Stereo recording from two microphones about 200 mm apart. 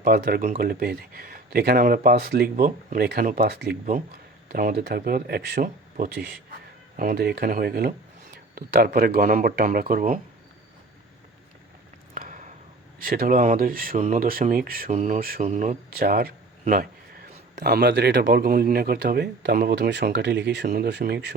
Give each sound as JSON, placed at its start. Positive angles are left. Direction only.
{"t": 0.0, "sound": "speech", "side_deg": -50}
{"t": 12.1, "sound": "a sound", "side_deg": -40}
{"t": 13.0, "sound": "speech", "side_deg": -45}